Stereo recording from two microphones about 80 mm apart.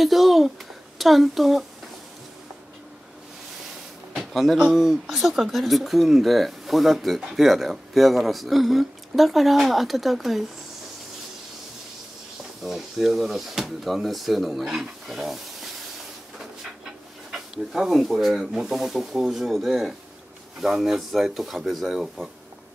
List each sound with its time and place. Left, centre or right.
0.0 s a sound: centre
0.9 s speech: centre
4.3 s speech: centre
12.6 s speech: centre
17.3 s speech: centre